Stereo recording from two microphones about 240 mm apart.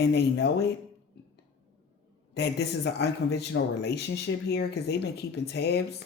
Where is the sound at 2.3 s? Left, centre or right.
Left.